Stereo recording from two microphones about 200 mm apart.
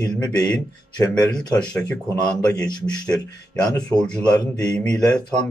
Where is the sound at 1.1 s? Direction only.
5° left (ahead or behind).